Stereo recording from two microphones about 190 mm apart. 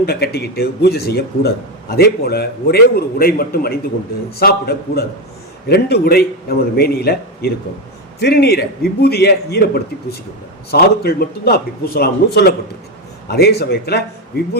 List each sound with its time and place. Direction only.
0.0 s a man's voice: 55° left (ahead or behind)